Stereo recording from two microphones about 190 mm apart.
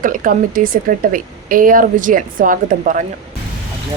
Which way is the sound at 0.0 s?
45° right (ahead or behind).